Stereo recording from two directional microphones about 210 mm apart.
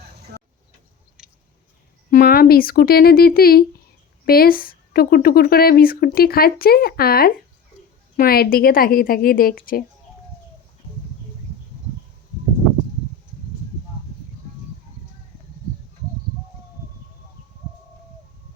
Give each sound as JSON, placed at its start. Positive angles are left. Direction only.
{"t": 1.2, "sound": "chewing", "side_deg": -5}
{"t": 2.0, "sound": "speech", "side_deg": 40}